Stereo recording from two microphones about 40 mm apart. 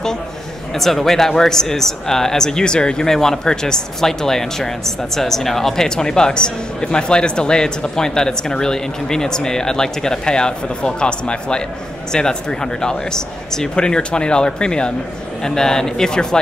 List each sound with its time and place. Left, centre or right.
0.7 s speech: centre